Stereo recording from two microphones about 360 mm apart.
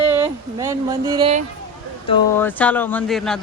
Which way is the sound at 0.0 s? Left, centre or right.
Centre.